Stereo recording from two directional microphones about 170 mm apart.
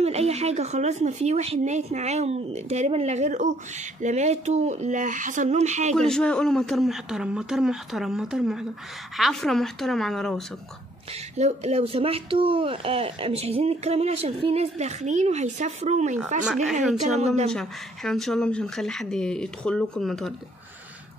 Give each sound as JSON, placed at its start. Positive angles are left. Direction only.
{"t": 0.0, "sound": "speech", "side_deg": -40}
{"t": 5.9, "sound": "speech", "side_deg": 5}
{"t": 11.3, "sound": "speech", "side_deg": -40}
{"t": 17.5, "sound": "speech", "side_deg": 5}